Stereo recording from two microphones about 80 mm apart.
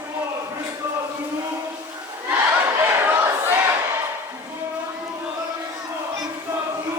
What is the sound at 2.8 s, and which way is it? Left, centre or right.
Crowd, right.